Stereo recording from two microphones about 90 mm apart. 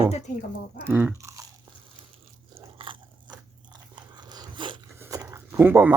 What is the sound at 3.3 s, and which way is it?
Biting, 55° right (ahead or behind).